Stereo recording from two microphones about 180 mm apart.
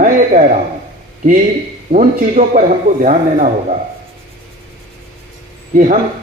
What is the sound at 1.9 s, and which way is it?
Speech, 50° right (ahead or behind).